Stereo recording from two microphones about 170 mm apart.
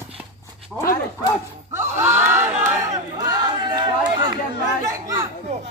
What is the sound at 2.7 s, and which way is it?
Chatter, 20° right (ahead or behind).